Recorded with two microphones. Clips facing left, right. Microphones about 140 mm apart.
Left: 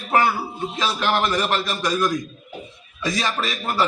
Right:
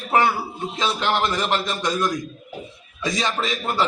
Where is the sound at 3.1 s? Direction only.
20° right (ahead or behind).